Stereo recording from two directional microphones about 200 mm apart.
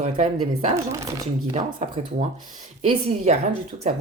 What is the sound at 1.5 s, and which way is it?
Speech, 30° right (ahead or behind).